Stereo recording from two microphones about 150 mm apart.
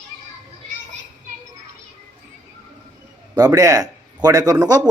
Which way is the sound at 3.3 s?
25° right (ahead or behind).